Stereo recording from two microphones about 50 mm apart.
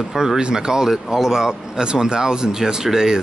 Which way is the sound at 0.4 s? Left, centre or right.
Centre.